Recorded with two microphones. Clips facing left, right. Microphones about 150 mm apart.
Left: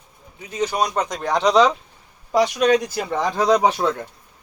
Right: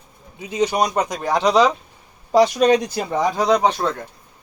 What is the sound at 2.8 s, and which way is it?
Speech, 20° right (ahead or behind).